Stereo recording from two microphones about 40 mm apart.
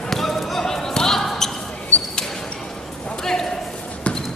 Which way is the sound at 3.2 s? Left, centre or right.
Centre.